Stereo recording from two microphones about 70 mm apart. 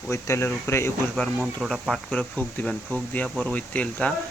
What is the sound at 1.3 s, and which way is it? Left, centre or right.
Speech, centre.